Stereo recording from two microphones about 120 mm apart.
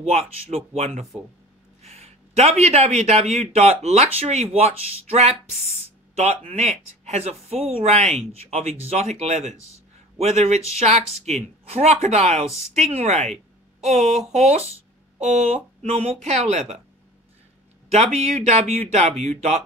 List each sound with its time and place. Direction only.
0.0 s a man's voice: 60° right (ahead or behind)
15.9 s speech: 60° right (ahead or behind)
17.9 s speech: 65° right (ahead or behind)